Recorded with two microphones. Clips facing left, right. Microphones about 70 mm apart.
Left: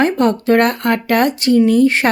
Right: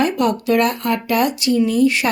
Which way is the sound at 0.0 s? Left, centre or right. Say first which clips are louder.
Left 3 dB; left.